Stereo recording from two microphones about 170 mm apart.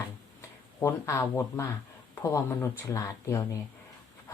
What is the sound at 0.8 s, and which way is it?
Speech, 15° left (ahead or behind).